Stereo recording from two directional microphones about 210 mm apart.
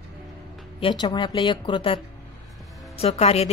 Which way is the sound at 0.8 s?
20° left (ahead or behind).